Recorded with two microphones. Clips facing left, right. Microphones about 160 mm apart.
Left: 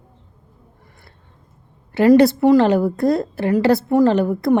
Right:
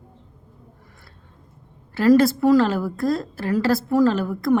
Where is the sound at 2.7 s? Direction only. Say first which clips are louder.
Left 6 dB; 20° left (ahead or behind).